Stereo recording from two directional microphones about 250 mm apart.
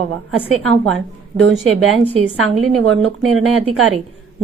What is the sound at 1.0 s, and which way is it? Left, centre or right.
Speech, right.